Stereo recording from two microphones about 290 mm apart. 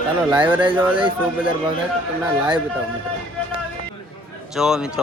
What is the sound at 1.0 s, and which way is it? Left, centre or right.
Speech, centre.